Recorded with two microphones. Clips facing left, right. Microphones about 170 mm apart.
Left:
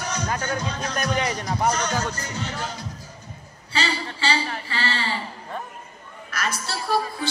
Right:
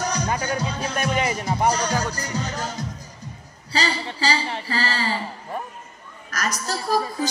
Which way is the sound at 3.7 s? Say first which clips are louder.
Right 2 dB; 35° right (ahead or behind).